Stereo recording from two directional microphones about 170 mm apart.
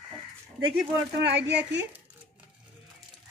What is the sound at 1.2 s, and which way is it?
Speech, 90° right.